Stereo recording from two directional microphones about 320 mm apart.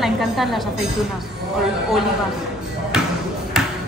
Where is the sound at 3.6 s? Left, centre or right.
Centre.